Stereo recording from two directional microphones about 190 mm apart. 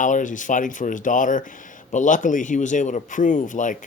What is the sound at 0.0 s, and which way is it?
Speech, 40° left (ahead or behind).